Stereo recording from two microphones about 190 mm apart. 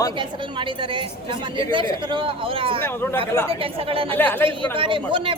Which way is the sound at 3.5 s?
30° right (ahead or behind).